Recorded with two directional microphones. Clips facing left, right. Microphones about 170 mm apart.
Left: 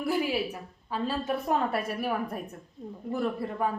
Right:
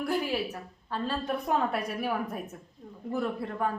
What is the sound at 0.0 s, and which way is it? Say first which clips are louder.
A woman's voice: left 1 dB; 5° left (ahead or behind).